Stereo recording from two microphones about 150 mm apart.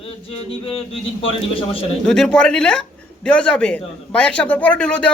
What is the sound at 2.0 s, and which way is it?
Speech, 5° left (ahead or behind).